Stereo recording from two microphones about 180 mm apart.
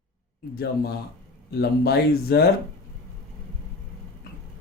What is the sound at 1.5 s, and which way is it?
Speech, 60° left (ahead or behind).